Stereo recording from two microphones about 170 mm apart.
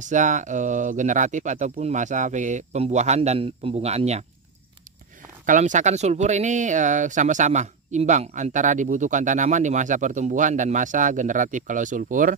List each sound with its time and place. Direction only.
0.0 s speech: 45° right (ahead or behind)
5.4 s speech: 50° right (ahead or behind)